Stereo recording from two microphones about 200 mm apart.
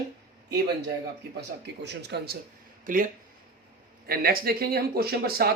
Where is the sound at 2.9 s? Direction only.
40° right (ahead or behind).